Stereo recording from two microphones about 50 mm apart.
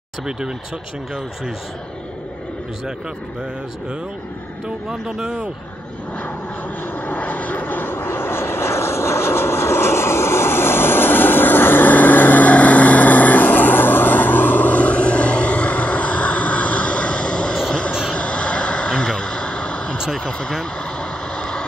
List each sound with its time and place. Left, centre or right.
4.6 s speech: centre
7.1 s vehicle: left
18.1 s a sound: left
19.0 s vehicle: centre
20.2 s speech: centre
21.4 s vehicle: centre